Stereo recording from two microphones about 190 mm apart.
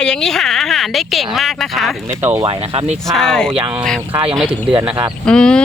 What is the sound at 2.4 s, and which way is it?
Speech, 30° right (ahead or behind).